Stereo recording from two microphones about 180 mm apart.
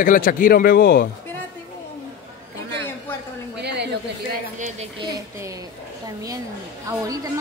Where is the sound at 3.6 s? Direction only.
70° right (ahead or behind).